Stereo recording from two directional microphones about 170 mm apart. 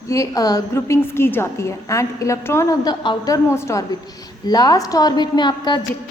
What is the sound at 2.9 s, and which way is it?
A woman's voice, 30° left (ahead or behind).